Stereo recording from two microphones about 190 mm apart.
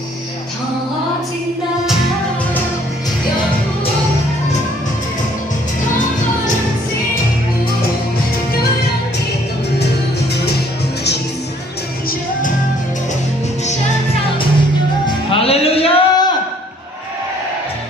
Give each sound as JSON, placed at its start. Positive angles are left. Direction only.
{"t": 15.0, "sound": "music", "side_deg": 30}